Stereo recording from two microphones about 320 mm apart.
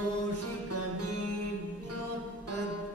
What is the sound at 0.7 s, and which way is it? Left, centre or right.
Music, right.